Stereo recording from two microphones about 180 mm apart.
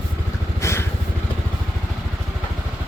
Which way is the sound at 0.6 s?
15° left (ahead or behind).